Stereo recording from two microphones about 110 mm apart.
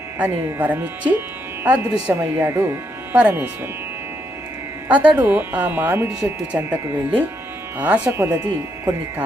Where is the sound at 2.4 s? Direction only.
25° right (ahead or behind).